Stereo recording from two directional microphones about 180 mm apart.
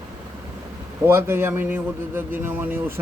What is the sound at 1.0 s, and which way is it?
Speech, 15° right (ahead or behind).